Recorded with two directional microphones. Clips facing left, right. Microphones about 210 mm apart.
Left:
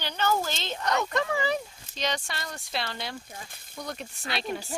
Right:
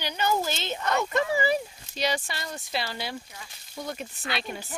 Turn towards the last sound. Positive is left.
turn(degrees=0)  # may be behind; listen again after turning